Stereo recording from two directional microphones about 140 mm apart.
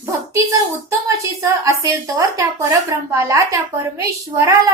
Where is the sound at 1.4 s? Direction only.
25° right (ahead or behind).